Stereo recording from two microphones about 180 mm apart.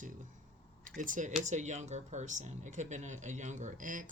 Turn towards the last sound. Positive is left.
turn(degrees=-50)  # may be behind; listen again after turning